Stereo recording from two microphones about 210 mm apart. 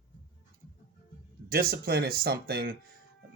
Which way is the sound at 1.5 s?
45° right (ahead or behind).